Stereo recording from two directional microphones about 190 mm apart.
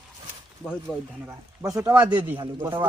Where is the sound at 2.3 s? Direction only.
25° right (ahead or behind).